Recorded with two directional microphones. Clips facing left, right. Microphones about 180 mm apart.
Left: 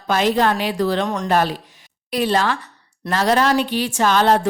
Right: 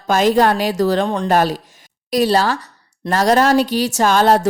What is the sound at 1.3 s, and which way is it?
A woman's voice, 40° right (ahead or behind).